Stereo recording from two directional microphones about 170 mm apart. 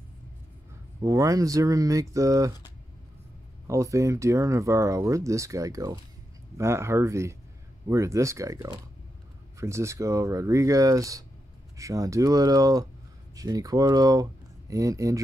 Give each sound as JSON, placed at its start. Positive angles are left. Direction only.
{"t": 1.0, "sound": "speech", "side_deg": -20}
{"t": 3.6, "sound": "speech", "side_deg": -20}